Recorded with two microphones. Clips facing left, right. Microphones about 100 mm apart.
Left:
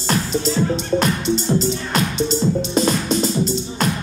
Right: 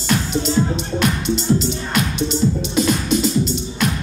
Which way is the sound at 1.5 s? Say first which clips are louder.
Left 1 dB; 40° left (ahead or behind).